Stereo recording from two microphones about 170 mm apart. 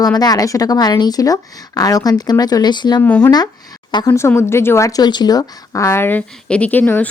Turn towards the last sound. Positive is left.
turn(degrees=10)  # may be behind; listen again after turning